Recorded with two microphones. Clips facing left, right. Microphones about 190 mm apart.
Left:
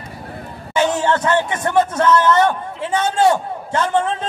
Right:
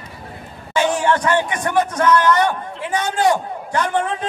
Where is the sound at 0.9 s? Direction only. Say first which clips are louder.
Even; 20° left (ahead or behind).